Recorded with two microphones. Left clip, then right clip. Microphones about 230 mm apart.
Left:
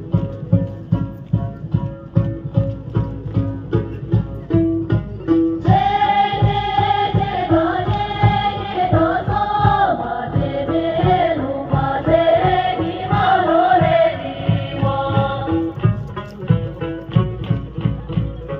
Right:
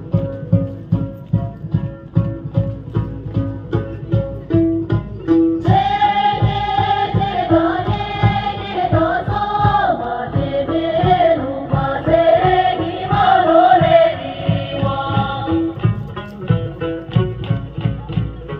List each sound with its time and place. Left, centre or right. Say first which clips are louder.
2.5 s music: left 1 dB; right